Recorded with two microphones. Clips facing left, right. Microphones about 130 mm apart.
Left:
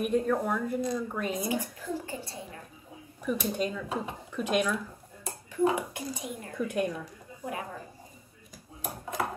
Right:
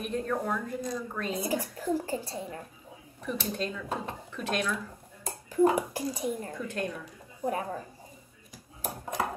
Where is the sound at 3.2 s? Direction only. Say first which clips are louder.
Left 3 dB; 10° left (ahead or behind).